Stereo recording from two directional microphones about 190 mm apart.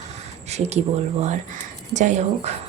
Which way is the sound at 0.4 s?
35° right (ahead or behind).